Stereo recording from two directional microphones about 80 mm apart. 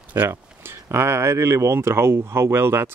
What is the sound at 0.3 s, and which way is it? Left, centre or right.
Speech, right.